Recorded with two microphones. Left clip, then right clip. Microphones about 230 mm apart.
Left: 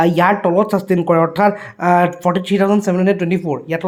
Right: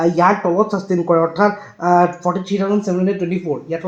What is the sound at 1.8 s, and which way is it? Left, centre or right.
Speech, left.